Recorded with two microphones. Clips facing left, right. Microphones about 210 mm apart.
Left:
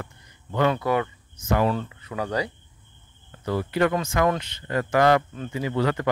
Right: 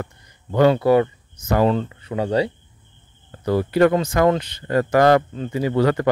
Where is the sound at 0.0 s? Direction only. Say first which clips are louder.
Right 7 dB; 35° right (ahead or behind).